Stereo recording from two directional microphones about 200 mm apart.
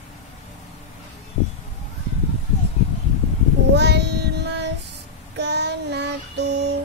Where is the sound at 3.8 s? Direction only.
55° right (ahead or behind).